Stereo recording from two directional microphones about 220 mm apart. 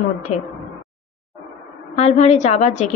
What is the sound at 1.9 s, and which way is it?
Speech, 30° left (ahead or behind).